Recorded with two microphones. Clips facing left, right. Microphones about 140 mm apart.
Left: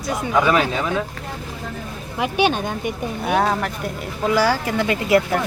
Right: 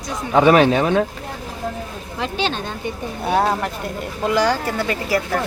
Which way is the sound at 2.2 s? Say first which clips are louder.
Left 4 dB; 15° left (ahead or behind).